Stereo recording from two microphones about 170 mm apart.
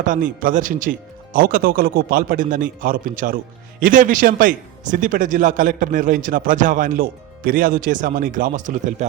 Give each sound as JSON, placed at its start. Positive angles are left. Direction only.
{"t": 0.0, "sound": "speech", "side_deg": -50}